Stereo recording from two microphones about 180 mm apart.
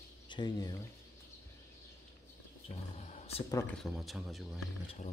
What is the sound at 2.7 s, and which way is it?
Roaring cats, 35° left (ahead or behind).